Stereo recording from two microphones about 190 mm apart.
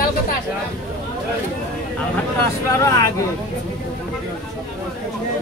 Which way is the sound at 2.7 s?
15° left (ahead or behind).